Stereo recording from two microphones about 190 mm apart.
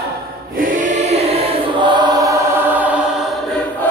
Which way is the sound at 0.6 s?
45° right (ahead or behind).